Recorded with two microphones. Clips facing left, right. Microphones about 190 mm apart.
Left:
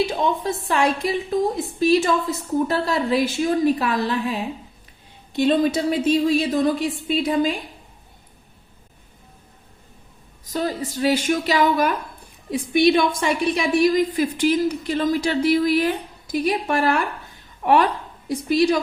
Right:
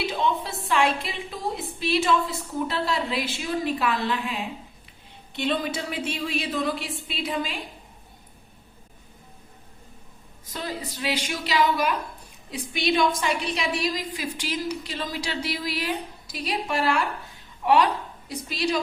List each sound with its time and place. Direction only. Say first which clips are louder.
0.0 s a woman's voice: left 5 dB; 45° left (ahead or behind)
10.4 s a woman's voice: left 8 dB; 45° left (ahead or behind)